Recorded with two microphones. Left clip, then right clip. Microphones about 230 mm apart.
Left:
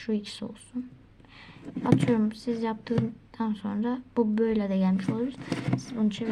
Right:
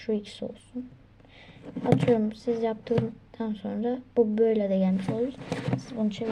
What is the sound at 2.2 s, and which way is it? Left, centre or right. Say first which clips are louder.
A woman's voice: right 2 dB; centre.